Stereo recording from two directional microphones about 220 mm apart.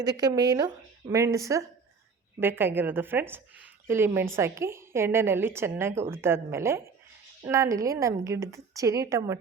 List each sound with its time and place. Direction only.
0.0 s a woman's voice: 15° right (ahead or behind)